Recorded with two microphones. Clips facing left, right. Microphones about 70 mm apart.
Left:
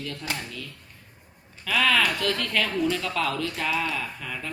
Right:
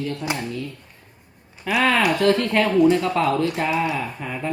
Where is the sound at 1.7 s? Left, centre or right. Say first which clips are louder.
Right 4 dB; right.